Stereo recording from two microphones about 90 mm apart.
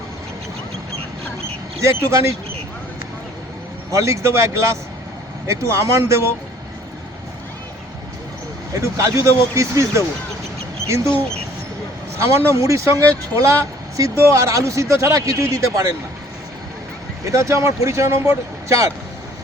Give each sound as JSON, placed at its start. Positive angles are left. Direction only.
{"t": 1.8, "sound": "speech", "side_deg": -35}
{"t": 3.9, "sound": "speech", "side_deg": -35}
{"t": 8.7, "sound": "speech", "side_deg": -35}
{"t": 12.2, "sound": "speech", "side_deg": -35}
{"t": 17.2, "sound": "speech", "side_deg": -35}